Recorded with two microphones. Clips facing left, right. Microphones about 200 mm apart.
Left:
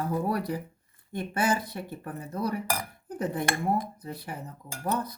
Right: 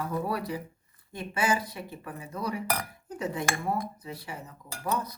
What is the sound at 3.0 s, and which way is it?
Cutlery, 50° left (ahead or behind).